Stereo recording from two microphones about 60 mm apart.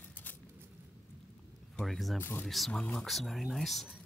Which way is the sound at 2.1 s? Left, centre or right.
Left.